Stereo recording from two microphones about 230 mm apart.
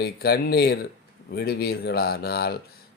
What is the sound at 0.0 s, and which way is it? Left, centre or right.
Speech, left.